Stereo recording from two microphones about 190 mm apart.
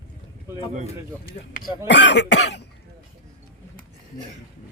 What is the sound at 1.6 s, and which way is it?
Speech, 60° left (ahead or behind).